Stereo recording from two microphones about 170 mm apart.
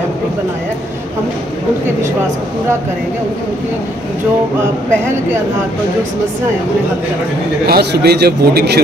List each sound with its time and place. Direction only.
4.6 s speech: 15° right (ahead or behind)
7.6 s a man's voice: 70° right (ahead or behind)